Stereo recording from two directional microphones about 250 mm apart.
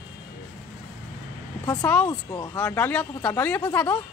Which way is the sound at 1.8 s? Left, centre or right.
Centre.